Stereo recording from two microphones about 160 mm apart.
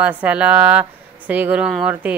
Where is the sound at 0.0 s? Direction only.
10° right (ahead or behind).